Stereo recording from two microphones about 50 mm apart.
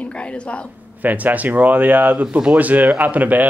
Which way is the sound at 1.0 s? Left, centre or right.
Right.